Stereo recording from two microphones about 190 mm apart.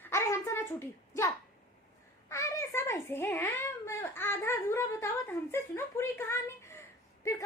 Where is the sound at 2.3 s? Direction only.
15° left (ahead or behind).